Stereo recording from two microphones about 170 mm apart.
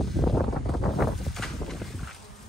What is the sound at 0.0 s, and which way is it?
Wind, centre (ahead or behind).